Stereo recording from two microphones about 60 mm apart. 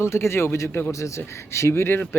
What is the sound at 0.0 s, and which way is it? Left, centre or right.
Speech, left.